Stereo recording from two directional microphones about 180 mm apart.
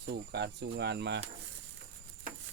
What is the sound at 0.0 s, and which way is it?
Speech, 65° right (ahead or behind).